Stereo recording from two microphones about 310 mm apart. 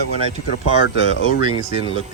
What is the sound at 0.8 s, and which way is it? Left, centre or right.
Speech, left.